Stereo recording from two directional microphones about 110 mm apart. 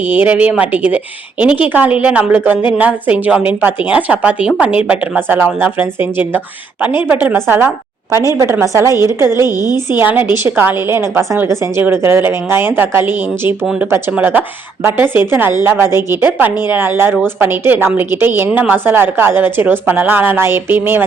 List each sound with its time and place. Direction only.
0.1 s a woman's voice: 15° right (ahead or behind)
9.6 s a woman's voice: 35° left (ahead or behind)
10.0 s a woman's voice: 15° right (ahead or behind)